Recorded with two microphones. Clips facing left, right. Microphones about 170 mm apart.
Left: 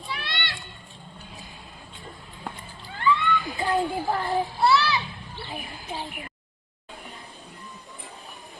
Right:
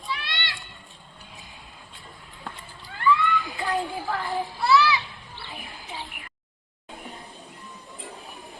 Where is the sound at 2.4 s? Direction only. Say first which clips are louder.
Left 2 dB; 20° left (ahead or behind).